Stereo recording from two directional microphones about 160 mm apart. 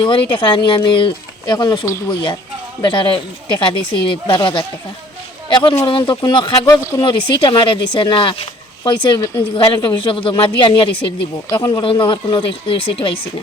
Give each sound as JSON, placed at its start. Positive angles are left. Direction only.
{"t": 0.0, "sound": "speech", "side_deg": 30}